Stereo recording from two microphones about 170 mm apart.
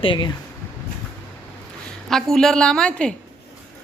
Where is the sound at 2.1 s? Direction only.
Centre (ahead or behind).